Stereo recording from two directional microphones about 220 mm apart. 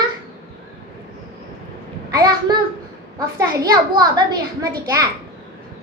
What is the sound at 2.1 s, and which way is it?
A woman's voice, 20° right (ahead or behind).